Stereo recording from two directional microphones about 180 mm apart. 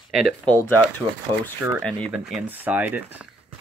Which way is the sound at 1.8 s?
5° left (ahead or behind).